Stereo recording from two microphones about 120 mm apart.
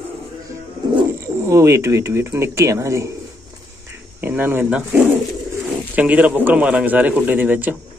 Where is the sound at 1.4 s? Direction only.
25° right (ahead or behind).